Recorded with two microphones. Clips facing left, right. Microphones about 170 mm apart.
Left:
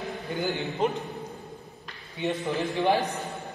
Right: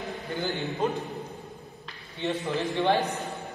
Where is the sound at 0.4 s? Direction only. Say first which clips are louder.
Left 2 dB; 20° left (ahead or behind).